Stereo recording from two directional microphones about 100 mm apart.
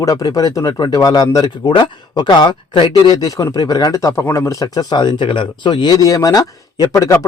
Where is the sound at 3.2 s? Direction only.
35° left (ahead or behind).